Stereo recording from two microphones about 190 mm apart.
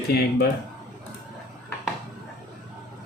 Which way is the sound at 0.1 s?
55° left (ahead or behind).